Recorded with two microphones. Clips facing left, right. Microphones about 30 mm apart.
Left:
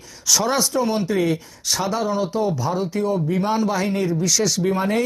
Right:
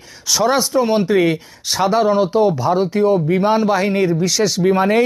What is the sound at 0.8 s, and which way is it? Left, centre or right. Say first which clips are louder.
Speech: right 6 dB; right.